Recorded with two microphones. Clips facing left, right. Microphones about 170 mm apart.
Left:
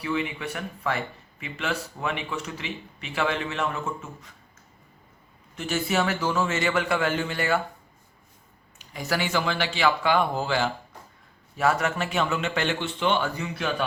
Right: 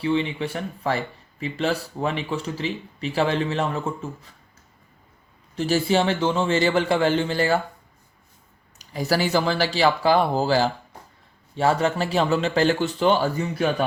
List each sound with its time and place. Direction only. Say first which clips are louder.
0.0 s speech: right 5 dB; 30° right (ahead or behind)
5.5 s speech: right 5 dB; 35° right (ahead or behind)
8.8 s speech: right 5 dB; 35° right (ahead or behind)